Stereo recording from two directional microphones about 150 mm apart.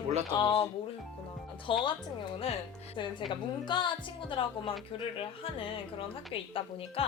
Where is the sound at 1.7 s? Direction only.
35° left (ahead or behind).